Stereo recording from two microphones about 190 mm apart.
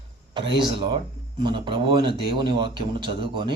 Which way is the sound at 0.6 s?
25° right (ahead or behind).